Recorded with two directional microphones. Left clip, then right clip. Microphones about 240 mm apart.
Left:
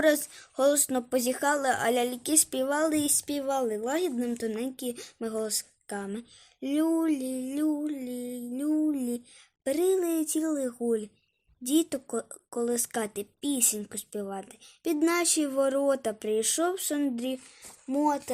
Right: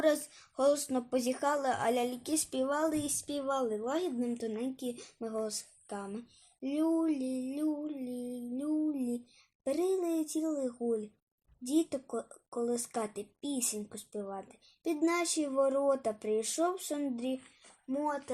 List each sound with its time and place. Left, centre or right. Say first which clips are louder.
0.0 s a woman's voice: left 5 dB; left
10.7 s speech: left 5 dB; left
11.6 s a woman's voice: left 5 dB; left
12.1 s speech: left 5 dB; left
12.6 s a woman's voice: left 4 dB; left